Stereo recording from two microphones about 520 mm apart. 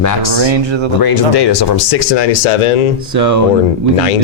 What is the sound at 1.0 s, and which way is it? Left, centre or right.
Speech, left.